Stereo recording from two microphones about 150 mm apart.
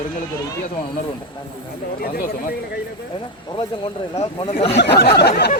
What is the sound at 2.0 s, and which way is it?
Speech, 80° left.